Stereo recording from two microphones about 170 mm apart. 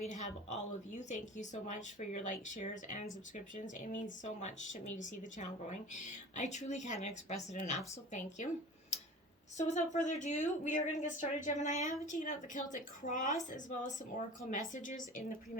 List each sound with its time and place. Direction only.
0.9 s speech: 45° left (ahead or behind)
9.6 s speech: 45° left (ahead or behind)
11.7 s a woman's voice: 20° right (ahead or behind)
12.0 s speech: 50° left (ahead or behind)